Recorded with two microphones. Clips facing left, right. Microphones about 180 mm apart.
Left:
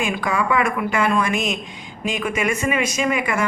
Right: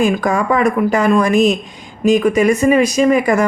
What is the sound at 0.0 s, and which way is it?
Speech, 45° right (ahead or behind).